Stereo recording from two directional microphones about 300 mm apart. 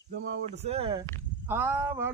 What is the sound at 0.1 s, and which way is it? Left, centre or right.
Speech, right.